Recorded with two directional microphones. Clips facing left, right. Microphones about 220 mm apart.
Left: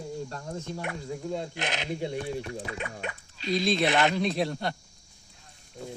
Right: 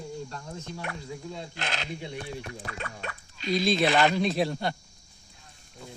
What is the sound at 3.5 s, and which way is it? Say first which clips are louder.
Speech: right 1 dB; centre (ahead or behind).